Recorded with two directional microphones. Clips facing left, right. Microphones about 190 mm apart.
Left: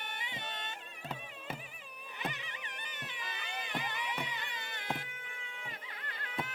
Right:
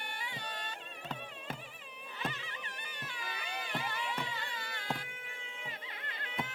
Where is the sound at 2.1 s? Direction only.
15° left (ahead or behind).